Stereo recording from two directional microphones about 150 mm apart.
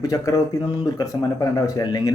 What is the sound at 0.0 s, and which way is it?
Speech, 25° left (ahead or behind).